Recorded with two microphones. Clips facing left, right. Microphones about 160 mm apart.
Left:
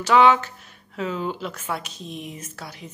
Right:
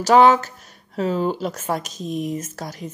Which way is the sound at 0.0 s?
40° right (ahead or behind).